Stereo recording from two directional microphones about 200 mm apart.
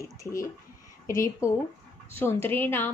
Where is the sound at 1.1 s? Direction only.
15° left (ahead or behind).